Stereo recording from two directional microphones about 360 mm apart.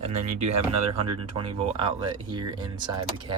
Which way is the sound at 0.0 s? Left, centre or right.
Centre.